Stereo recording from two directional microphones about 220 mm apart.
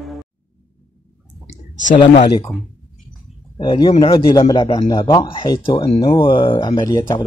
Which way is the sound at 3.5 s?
20° left (ahead or behind).